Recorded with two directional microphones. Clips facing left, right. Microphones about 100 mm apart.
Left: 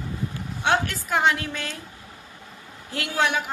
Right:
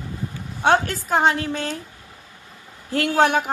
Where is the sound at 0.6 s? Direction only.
40° right (ahead or behind).